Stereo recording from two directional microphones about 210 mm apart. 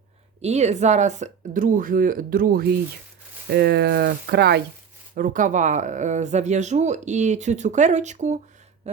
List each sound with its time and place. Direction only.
0.4 s speech: 30° right (ahead or behind); by 4.6 s 50° right (ahead or behind)
5.1 s speech: 40° right (ahead or behind)